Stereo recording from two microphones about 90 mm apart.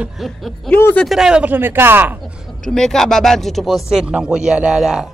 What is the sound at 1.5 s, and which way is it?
Speech, 25° right (ahead or behind).